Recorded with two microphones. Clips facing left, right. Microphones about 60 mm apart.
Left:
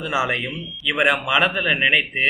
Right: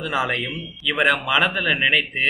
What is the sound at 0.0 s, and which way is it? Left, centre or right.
Speech, centre.